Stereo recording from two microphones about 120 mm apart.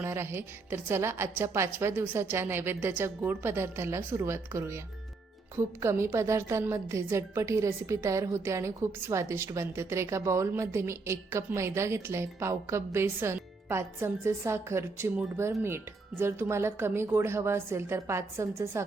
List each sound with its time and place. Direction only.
0.0 s a woman's voice: 20° right (ahead or behind)